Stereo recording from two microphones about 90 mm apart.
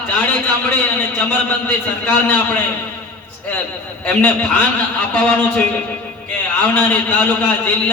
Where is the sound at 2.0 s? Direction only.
20° left (ahead or behind).